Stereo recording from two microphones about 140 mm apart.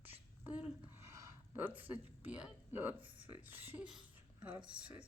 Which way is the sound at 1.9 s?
10° right (ahead or behind).